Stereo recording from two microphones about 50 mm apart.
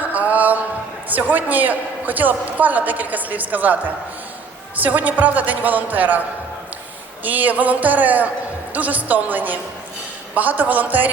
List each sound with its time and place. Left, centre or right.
0.1 s a sound: right
1.1 s a man's voice: right
7.3 s a man's voice: right